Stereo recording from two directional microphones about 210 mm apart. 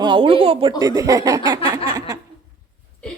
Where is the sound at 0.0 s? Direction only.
25° right (ahead or behind).